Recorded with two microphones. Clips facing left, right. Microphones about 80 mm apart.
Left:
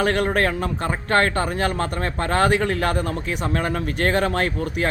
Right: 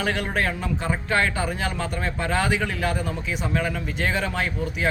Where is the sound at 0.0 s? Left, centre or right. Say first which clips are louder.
Left 5 dB; left.